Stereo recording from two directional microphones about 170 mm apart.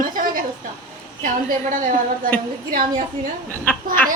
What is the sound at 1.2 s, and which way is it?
Speech, 50° right (ahead or behind).